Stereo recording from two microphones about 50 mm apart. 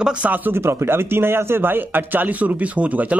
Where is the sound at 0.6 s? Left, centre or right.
Right.